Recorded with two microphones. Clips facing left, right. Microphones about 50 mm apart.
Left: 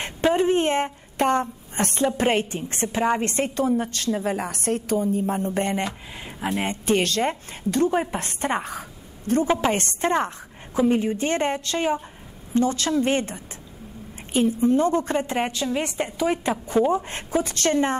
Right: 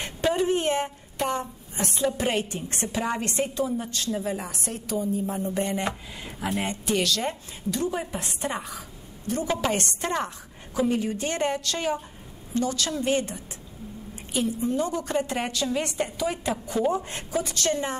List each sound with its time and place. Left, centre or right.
0.0 s a sound: left
2.1 s a woman's voice: left
6.2 s speech: centre
6.7 s a woman's voice: left